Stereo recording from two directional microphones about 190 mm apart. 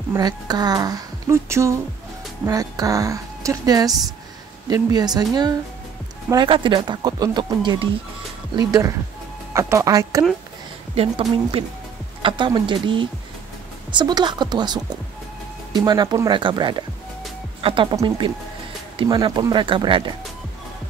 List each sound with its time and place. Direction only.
0.1 s a woman's voice: 20° right (ahead or behind)
11.0 s speech: 30° right (ahead or behind)